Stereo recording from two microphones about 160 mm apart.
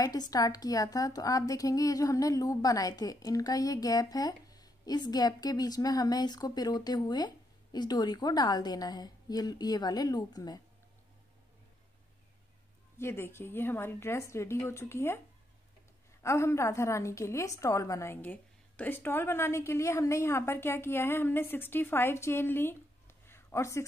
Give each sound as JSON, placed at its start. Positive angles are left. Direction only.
{"t": 0.3, "sound": "a woman's voice", "side_deg": 25}
{"t": 12.9, "sound": "a woman's voice", "side_deg": 15}
{"t": 16.2, "sound": "a woman's voice", "side_deg": 15}